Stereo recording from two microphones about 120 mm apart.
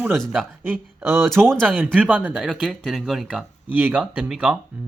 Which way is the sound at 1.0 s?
20° right (ahead or behind).